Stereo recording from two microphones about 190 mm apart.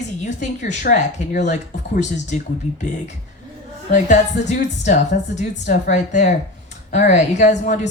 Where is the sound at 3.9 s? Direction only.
40° left (ahead or behind).